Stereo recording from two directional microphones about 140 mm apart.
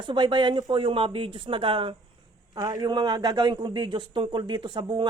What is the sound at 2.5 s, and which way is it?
A man's voice, 30° right (ahead or behind).